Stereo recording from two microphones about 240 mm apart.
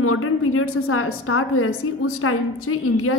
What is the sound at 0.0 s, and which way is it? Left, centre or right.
A woman's voice, left.